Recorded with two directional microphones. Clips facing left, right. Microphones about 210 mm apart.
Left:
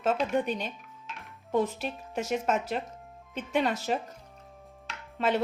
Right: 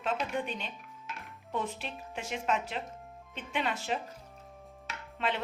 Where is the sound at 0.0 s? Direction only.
40° left (ahead or behind).